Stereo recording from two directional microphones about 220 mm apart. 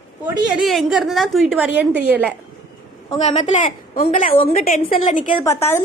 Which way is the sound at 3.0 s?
30° left (ahead or behind).